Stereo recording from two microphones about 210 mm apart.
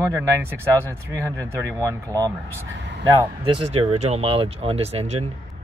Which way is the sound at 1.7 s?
15° right (ahead or behind).